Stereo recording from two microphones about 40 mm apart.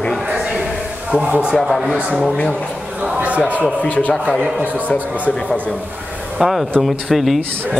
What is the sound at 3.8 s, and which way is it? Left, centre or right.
Speech, left.